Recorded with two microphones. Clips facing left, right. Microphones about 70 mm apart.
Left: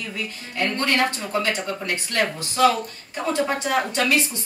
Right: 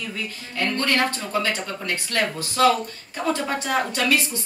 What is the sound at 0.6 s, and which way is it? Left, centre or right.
A woman's voice, left.